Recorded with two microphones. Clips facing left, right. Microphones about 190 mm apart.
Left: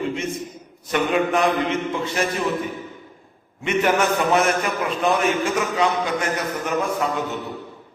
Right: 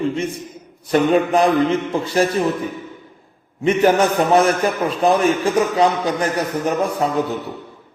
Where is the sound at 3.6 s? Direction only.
35° right (ahead or behind).